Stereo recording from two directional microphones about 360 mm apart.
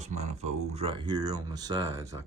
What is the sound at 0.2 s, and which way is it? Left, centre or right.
Speech, centre.